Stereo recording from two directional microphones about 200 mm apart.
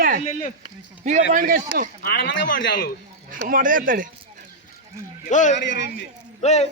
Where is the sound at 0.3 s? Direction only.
40° left (ahead or behind).